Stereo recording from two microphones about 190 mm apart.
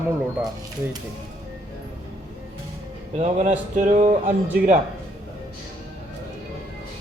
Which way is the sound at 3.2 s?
35° right (ahead or behind).